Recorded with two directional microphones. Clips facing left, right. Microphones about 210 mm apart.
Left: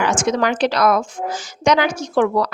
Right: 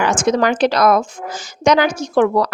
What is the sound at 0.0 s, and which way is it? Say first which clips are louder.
Speech: right 3 dB; 40° right (ahead or behind).